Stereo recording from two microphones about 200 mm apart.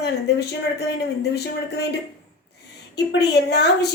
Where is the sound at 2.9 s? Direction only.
55° left (ahead or behind).